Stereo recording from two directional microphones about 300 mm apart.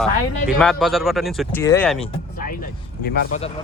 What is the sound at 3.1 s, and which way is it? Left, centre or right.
Speech, left.